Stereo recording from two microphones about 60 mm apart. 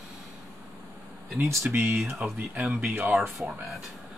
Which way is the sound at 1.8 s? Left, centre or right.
Right.